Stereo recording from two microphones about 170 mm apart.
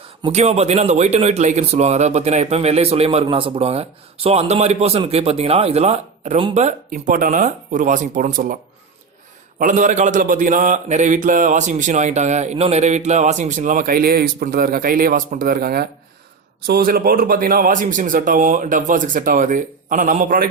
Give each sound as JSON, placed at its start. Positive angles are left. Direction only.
{"t": 0.3, "sound": "speech", "side_deg": -40}
{"t": 9.6, "sound": "a man's voice", "side_deg": -50}